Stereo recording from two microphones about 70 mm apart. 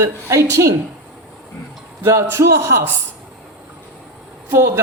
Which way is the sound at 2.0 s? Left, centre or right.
Right.